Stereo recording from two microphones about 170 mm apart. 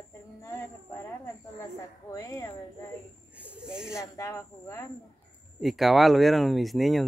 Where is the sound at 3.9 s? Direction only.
15° left (ahead or behind).